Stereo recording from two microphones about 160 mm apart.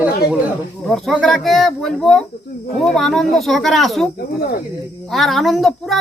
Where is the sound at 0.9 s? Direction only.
Centre (ahead or behind).